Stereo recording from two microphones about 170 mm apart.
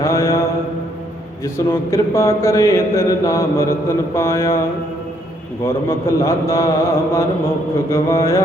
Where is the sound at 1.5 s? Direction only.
15° left (ahead or behind).